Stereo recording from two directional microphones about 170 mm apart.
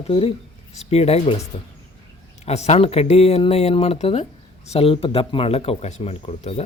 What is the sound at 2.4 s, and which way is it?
Speech, 40° left (ahead or behind).